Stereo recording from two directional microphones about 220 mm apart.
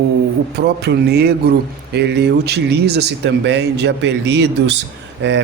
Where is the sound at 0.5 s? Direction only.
50° right (ahead or behind).